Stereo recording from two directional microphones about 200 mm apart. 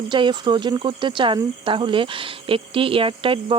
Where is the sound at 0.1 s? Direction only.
25° right (ahead or behind).